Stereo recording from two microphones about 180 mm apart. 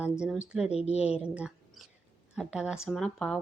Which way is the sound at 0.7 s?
35° left (ahead or behind).